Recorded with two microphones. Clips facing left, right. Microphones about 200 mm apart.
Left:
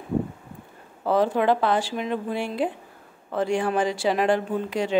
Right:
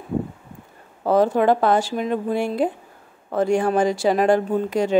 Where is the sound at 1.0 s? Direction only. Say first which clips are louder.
Right 4 dB; 45° right (ahead or behind).